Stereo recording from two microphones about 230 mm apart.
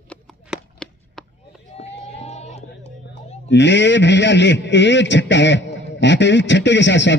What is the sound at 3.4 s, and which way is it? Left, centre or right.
A man's voice, left.